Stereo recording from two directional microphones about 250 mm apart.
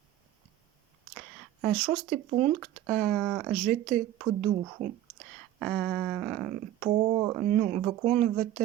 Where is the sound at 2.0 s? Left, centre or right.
Right.